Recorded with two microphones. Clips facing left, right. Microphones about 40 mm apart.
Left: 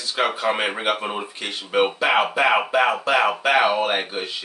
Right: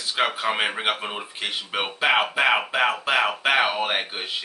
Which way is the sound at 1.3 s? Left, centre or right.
Centre.